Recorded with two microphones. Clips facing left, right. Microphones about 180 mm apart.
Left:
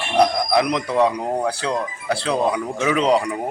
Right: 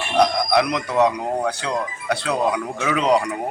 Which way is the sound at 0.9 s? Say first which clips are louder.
Even; 30° left (ahead or behind).